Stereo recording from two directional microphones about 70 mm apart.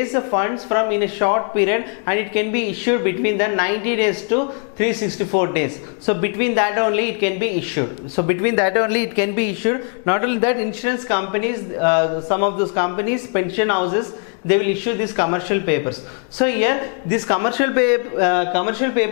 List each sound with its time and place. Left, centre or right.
0.0 s speech: centre